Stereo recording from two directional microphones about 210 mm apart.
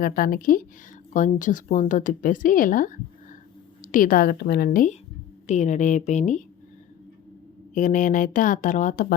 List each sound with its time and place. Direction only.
0.0 s a woman's voice: 45° left (ahead or behind)
7.7 s speech: 35° left (ahead or behind)